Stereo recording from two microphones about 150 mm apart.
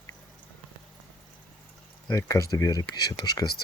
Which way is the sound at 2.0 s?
20° left (ahead or behind).